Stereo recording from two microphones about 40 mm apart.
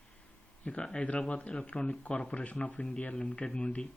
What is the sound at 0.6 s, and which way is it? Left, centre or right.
Speech, left.